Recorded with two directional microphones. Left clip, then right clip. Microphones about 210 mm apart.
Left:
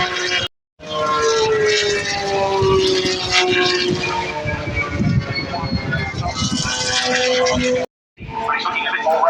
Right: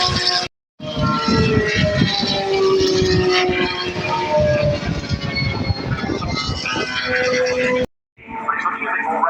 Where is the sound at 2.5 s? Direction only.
5° left (ahead or behind); by 3.8 s 40° left (ahead or behind).